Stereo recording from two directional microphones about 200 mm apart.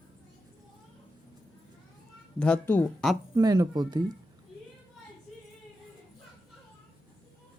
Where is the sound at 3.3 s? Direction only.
20° right (ahead or behind).